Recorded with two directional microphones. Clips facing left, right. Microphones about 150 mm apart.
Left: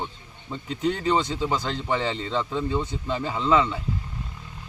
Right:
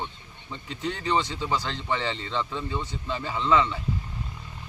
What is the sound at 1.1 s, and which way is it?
A man's voice, 20° left (ahead or behind).